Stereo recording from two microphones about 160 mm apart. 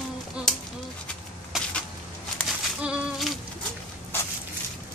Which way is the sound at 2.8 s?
5° right (ahead or behind).